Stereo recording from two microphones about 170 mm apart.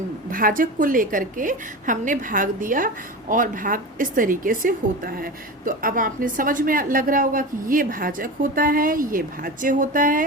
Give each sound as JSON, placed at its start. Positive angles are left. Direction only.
{"t": 0.3, "sound": "a woman's voice", "side_deg": -55}